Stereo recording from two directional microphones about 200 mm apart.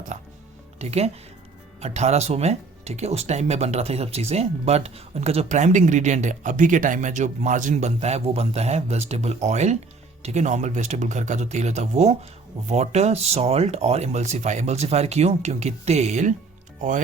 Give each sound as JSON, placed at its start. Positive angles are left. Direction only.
{"t": 0.8, "sound": "speech", "side_deg": -30}